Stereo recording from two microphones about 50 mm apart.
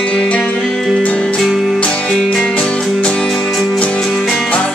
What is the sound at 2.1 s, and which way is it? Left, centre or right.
Music, centre.